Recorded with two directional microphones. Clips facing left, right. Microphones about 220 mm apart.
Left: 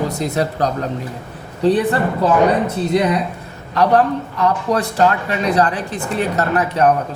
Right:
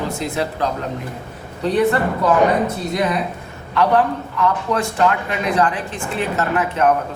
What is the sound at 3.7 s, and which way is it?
A man's voice, 40° left (ahead or behind).